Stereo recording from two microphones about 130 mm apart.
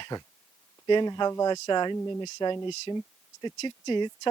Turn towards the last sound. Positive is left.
turn(degrees=35)  # may be behind; listen again after turning